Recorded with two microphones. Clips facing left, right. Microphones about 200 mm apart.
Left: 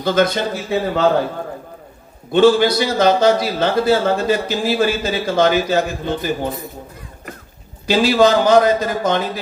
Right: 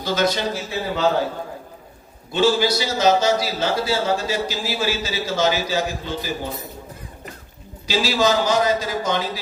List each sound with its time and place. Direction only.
0.0 s a man's voice: 55° left (ahead or behind)
2.3 s a man's voice: 55° left (ahead or behind)
7.9 s a man's voice: 55° left (ahead or behind)